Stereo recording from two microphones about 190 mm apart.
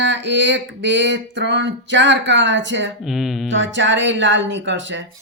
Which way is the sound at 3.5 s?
75° right (ahead or behind).